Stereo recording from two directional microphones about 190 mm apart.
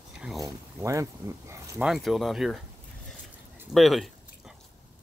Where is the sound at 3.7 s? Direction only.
Centre (ahead or behind).